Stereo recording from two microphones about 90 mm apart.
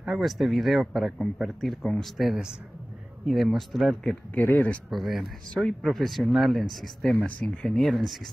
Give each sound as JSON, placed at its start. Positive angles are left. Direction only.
{"t": 0.0, "sound": "speech", "side_deg": 0}
{"t": 4.4, "sound": "speech", "side_deg": 20}
{"t": 4.9, "sound": "speech", "side_deg": 0}
{"t": 7.2, "sound": "speech", "side_deg": 15}
{"t": 7.6, "sound": "speech", "side_deg": 5}